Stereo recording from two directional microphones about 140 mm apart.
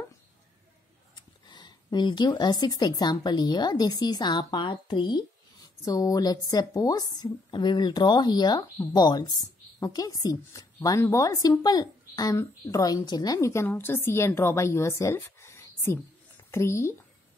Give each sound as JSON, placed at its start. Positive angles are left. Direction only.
{"t": 1.5, "sound": "a woman's voice", "side_deg": 30}